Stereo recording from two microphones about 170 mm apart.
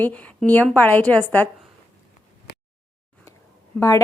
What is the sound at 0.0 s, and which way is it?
A woman's voice, 10° left (ahead or behind).